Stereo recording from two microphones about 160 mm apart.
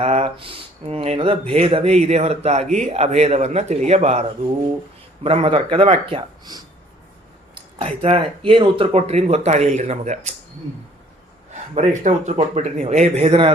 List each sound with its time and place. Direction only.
0.0 s speech: 40° right (ahead or behind)
11.7 s speech: 45° right (ahead or behind)